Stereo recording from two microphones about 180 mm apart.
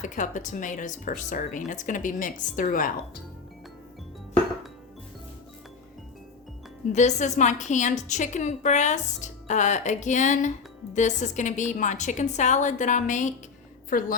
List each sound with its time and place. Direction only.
0.0 s a woman's voice: 45° left (ahead or behind)
6.9 s a woman's voice: 40° left (ahead or behind)